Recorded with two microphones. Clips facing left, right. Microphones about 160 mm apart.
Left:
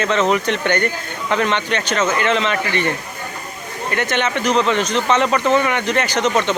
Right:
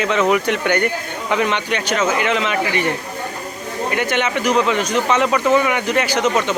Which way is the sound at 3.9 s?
10° right (ahead or behind).